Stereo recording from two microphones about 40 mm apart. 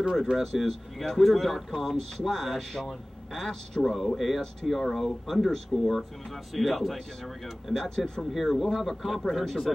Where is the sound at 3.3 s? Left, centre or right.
Centre.